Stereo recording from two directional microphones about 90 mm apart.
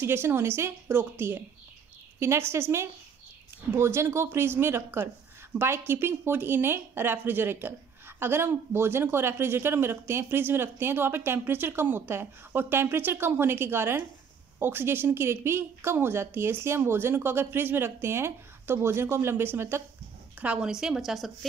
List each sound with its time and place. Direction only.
0.0 s speech: 25° right (ahead or behind)
3.7 s speech: 30° right (ahead or behind)
20.3 s speech: 15° right (ahead or behind)